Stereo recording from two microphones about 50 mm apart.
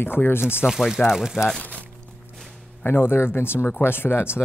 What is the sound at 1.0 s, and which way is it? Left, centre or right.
Speech, centre.